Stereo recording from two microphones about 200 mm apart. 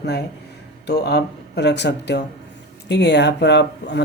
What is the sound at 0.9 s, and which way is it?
Speech, 55° left (ahead or behind).